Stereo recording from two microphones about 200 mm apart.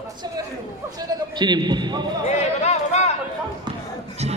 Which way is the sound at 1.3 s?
20° right (ahead or behind).